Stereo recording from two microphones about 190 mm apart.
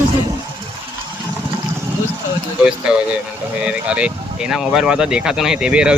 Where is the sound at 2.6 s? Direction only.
5° right (ahead or behind).